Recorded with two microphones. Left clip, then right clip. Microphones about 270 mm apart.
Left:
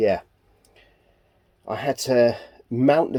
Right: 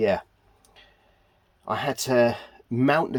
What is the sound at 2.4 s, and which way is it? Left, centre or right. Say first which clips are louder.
Speech: left 4 dB; right.